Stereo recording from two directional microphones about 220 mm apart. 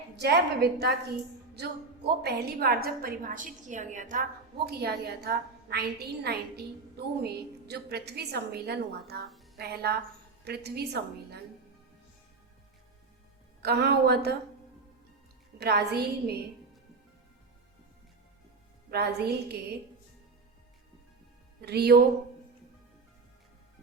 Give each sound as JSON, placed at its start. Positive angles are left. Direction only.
{"t": 0.2, "sound": "a woman's voice", "side_deg": -45}
{"t": 2.2, "sound": "a woman's voice", "side_deg": -45}
{"t": 13.6, "sound": "a woman's voice", "side_deg": -45}
{"t": 15.5, "sound": "a woman's voice", "side_deg": -50}
{"t": 18.9, "sound": "a woman's voice", "side_deg": -45}
{"t": 21.6, "sound": "speech", "side_deg": -45}